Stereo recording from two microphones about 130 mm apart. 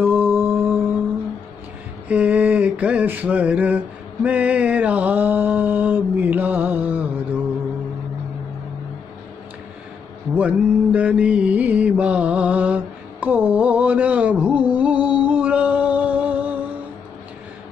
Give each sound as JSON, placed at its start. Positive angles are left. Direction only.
{"t": 0.0, "sound": "mantra", "side_deg": -15}
{"t": 2.0, "sound": "a sound", "side_deg": -10}
{"t": 10.3, "sound": "mantra", "side_deg": -10}